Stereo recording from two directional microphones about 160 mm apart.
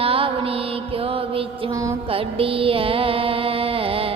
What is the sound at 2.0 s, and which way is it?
Music, 35° right (ahead or behind).